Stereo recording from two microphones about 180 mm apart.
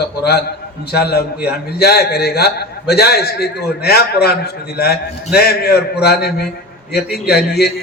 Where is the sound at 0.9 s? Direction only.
60° left (ahead or behind).